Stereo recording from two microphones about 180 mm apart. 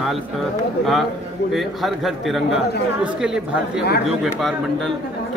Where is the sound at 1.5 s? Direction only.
Centre (ahead or behind).